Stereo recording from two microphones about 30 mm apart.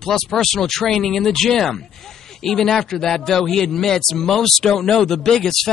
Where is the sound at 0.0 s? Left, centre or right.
Centre.